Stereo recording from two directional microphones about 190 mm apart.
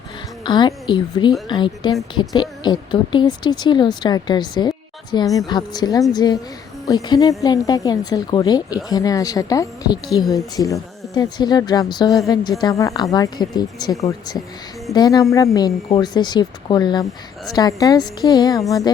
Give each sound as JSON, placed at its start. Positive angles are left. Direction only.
{"t": 0.4, "sound": "speech", "side_deg": 25}